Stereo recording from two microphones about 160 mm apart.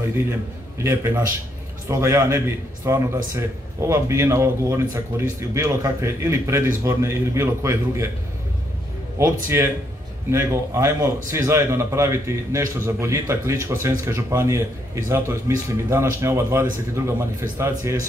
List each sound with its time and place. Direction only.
0.7 s a man's voice: 15° right (ahead or behind)
9.2 s a man's voice: 15° right (ahead or behind)